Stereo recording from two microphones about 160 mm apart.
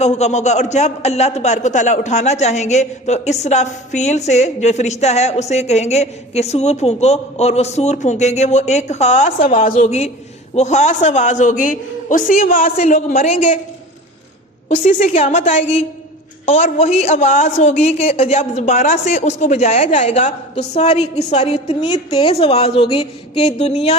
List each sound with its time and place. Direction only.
0.0 s a man's voice: 45° left (ahead or behind)
14.7 s a man's voice: 45° left (ahead or behind)
21.8 s a woman's voice: 25° left (ahead or behind)
22.3 s a woman's voice: 40° left (ahead or behind)